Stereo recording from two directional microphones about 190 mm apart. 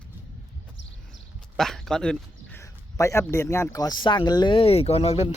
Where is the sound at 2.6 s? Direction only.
15° left (ahead or behind).